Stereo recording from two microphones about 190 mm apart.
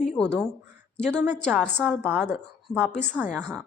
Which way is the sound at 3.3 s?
Centre (ahead or behind).